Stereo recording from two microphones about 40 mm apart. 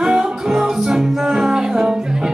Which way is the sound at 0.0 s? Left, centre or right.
Centre.